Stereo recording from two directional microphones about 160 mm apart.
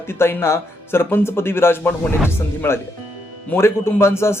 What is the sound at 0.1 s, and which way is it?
Speech, 15° left (ahead or behind).